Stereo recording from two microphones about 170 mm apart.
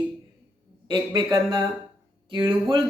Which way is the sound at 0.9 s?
30° right (ahead or behind).